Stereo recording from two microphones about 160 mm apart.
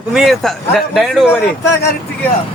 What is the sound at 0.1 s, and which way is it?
Speech, centre (ahead or behind).